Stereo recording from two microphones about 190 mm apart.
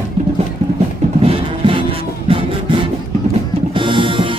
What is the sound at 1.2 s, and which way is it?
Music, 25° right (ahead or behind).